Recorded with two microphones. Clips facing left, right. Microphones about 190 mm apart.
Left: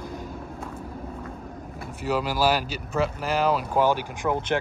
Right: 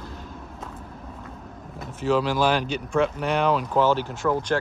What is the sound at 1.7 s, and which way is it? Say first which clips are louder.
Speech: right 4 dB; 10° left (ahead or behind).